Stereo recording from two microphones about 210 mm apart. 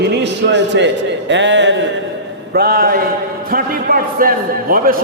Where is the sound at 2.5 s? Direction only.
45° right (ahead or behind).